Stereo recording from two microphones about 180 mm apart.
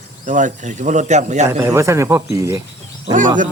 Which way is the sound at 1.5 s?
15° right (ahead or behind).